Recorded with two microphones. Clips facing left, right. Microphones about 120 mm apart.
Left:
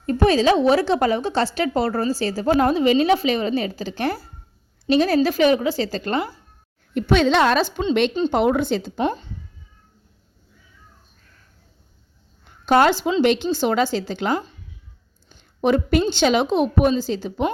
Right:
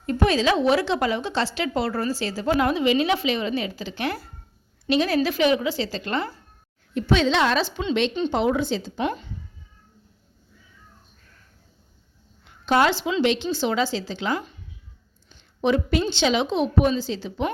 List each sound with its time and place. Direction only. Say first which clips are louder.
0.0 s a woman's voice: left 4 dB; 40° left (ahead or behind)
6.9 s a woman's voice: left 3 dB; 55° left (ahead or behind)
9.0 s a woman's voice: left 3 dB; 35° left (ahead or behind)
12.5 s a sound: left 4 dB; 45° left (ahead or behind)
13.2 s a woman's voice: left 3 dB; 50° left (ahead or behind)